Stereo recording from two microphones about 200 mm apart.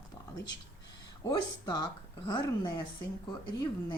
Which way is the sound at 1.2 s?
20° left (ahead or behind).